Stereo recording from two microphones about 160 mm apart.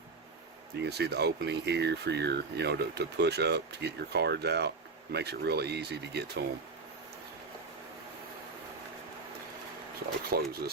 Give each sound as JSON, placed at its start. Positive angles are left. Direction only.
{"t": 0.8, "sound": "speech", "side_deg": -90}
{"t": 10.2, "sound": "speech", "side_deg": -70}